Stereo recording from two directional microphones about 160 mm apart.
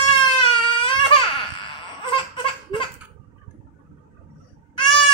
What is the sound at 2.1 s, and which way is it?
Laughter, 35° left (ahead or behind).